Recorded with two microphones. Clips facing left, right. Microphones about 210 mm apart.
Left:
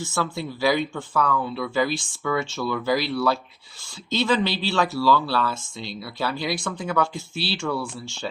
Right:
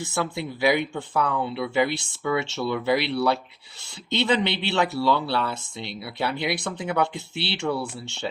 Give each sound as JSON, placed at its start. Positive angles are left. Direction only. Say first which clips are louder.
{"t": 0.1, "sound": "speech", "louder": "right 1 dB", "side_deg": -20}
{"t": 1.9, "sound": "speech", "louder": "left 2 dB", "side_deg": -65}
{"t": 2.2, "sound": "speech", "louder": "right 1 dB", "side_deg": -25}